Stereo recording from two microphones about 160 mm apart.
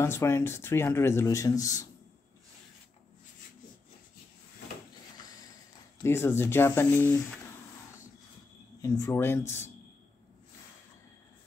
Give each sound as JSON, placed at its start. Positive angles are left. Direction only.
{"t": 0.0, "sound": "speech", "side_deg": 15}
{"t": 6.0, "sound": "speech", "side_deg": 15}
{"t": 8.8, "sound": "speech", "side_deg": 20}